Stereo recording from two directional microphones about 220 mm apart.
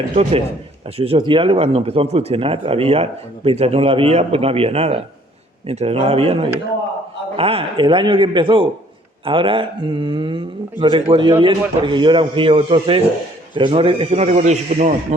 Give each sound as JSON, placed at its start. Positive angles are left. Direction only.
{"t": 0.1, "sound": "speech", "side_deg": -25}